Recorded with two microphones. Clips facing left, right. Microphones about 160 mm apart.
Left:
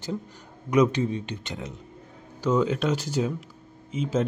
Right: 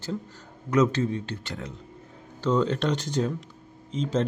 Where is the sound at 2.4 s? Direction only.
10° left (ahead or behind).